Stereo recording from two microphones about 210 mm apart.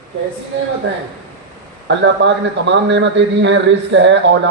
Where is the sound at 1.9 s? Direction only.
60° right (ahead or behind).